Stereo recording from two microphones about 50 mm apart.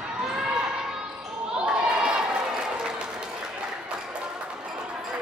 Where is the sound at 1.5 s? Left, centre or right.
Centre.